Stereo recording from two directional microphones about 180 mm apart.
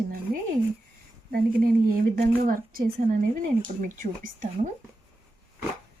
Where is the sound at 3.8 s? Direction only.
45° right (ahead or behind).